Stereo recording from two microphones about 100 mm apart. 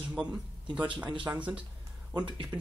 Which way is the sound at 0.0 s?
10° right (ahead or behind).